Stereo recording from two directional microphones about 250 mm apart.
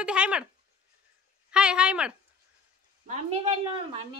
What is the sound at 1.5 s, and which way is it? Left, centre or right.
Speech, centre.